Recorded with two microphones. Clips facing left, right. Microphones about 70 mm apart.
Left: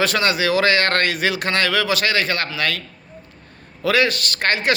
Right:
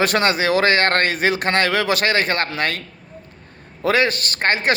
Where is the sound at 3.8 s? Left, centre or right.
Right.